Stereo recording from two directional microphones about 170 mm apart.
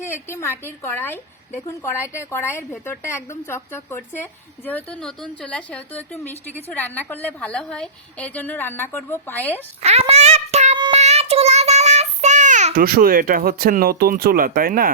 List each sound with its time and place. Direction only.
0.0 s a woman's voice: 15° left (ahead or behind)
9.8 s a sound: 40° right (ahead or behind)
10.9 s child singing: 40° right (ahead or behind)
12.8 s speech: 60° right (ahead or behind)